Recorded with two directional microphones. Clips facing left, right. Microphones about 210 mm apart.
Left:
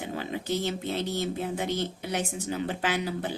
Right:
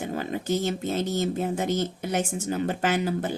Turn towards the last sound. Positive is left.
turn(degrees=-45)  # may be behind; listen again after turning